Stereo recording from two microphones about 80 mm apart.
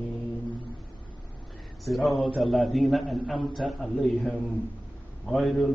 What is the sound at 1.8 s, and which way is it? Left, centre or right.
Speech, centre.